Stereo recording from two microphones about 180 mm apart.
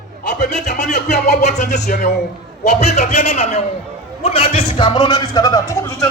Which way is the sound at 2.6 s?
40° left (ahead or behind).